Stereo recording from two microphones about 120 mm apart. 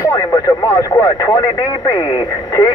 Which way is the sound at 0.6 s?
20° left (ahead or behind).